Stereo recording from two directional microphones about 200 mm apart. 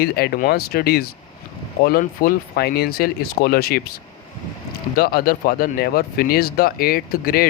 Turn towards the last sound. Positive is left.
turn(degrees=50)  # may be behind; listen again after turning